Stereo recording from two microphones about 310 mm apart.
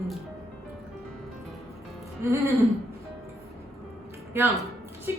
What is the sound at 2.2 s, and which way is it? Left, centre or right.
Speech, centre.